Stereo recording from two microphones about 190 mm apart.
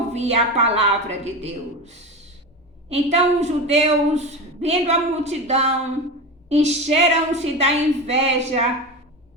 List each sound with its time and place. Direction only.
0.1 s a woman's voice: 35° right (ahead or behind)